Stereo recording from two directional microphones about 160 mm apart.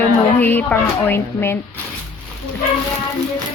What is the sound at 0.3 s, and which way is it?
Speech, 10° left (ahead or behind).